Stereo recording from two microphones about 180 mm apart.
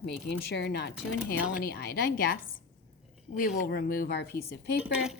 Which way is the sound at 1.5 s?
55° left (ahead or behind).